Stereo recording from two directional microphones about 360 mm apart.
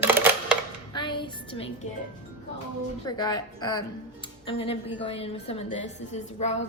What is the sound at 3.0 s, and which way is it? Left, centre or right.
Speech, centre.